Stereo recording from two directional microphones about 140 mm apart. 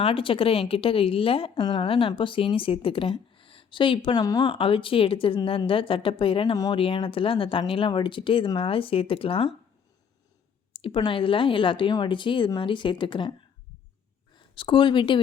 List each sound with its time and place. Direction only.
0.0 s a woman's voice: 40° left (ahead or behind)
10.7 s a woman's voice: 40° left (ahead or behind)
14.3 s speech: 35° left (ahead or behind)